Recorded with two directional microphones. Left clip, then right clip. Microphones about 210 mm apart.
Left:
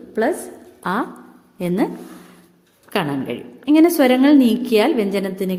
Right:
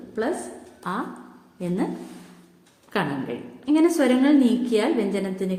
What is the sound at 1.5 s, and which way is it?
Speech, 45° left (ahead or behind).